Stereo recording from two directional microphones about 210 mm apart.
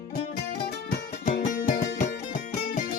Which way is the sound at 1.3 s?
40° left (ahead or behind).